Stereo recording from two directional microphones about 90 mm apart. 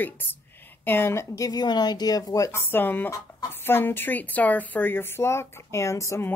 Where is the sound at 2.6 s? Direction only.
25° left (ahead or behind).